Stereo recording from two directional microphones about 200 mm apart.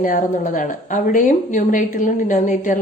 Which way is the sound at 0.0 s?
40° left (ahead or behind).